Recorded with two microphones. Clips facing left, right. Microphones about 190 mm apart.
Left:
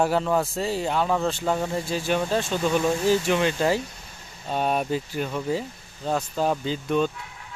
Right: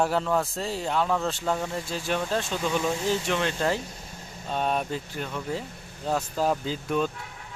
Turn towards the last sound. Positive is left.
turn(degrees=-5)  # may be behind; listen again after turning